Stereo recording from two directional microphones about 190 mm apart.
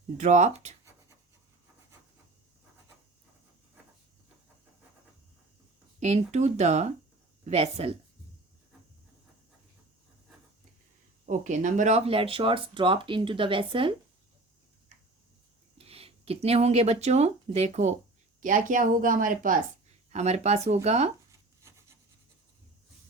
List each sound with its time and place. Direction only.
0.2 s speech: 40° right (ahead or behind)
6.0 s speech: 35° right (ahead or behind)
11.3 s speech: 40° right (ahead or behind)
15.8 s speech: 30° right (ahead or behind)
21.2 s a sound: 15° right (ahead or behind)